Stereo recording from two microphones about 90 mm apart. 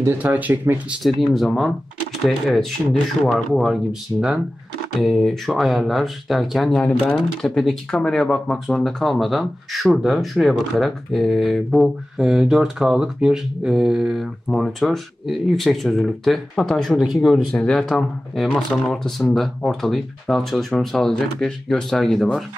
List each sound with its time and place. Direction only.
0.0 s speech: 20° right (ahead or behind)
1.0 s speech: centre (ahead or behind)
14.5 s speech: 5° left (ahead or behind)